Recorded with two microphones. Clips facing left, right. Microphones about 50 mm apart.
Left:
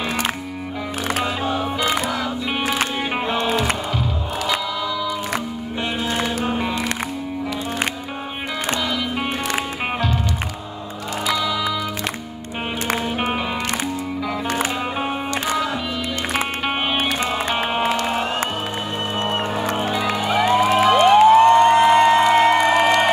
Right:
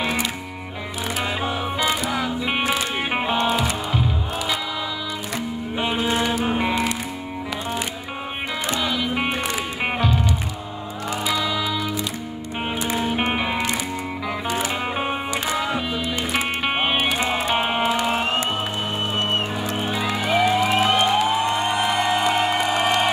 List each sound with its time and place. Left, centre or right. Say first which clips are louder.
1.2 s music: left 2 dB; centre
6.4 s music: right 1 dB; centre
8.8 s music: even; centre
11.3 s music: left 3 dB; centre
13.3 s music: even; centre
17.0 s music: even; centre
17.9 s a sound: even; centre
19.6 s music: left 3 dB; left
20.4 s music: left 6 dB; left